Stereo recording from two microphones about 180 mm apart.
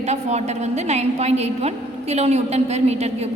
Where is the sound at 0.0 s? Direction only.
40° right (ahead or behind).